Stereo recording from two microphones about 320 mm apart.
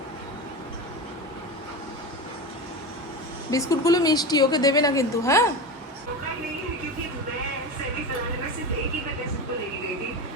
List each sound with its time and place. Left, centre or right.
3.5 s a woman's voice: centre